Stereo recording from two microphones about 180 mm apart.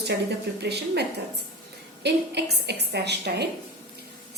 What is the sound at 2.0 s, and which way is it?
A woman's voice, 65° right (ahead or behind).